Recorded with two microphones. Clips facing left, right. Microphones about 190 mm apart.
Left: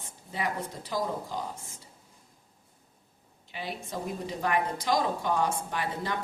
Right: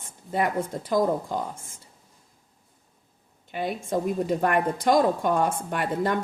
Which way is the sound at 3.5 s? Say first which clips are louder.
Right 9 dB; 50° right (ahead or behind).